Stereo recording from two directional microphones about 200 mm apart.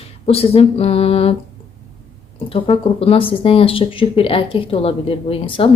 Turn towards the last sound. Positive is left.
turn(degrees=25)  # may be behind; listen again after turning